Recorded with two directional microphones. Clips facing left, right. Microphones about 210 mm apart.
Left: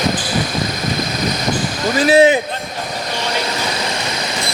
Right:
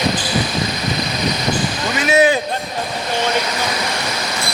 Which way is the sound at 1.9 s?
30° left (ahead or behind).